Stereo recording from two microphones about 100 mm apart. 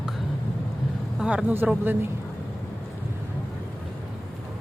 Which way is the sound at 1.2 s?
10° right (ahead or behind).